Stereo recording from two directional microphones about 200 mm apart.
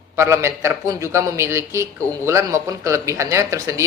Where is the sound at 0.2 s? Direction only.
15° right (ahead or behind).